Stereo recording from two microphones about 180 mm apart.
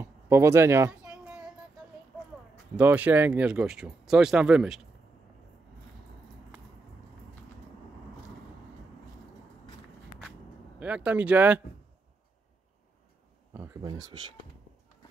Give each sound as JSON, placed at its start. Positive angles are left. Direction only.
{"t": 0.0, "sound": "a sound", "side_deg": -15}
{"t": 2.7, "sound": "speech", "side_deg": -10}
{"t": 10.8, "sound": "speech", "side_deg": -5}
{"t": 13.8, "sound": "speech", "side_deg": -25}